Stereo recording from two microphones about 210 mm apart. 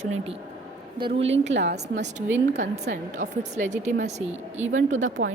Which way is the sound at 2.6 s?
35° right (ahead or behind).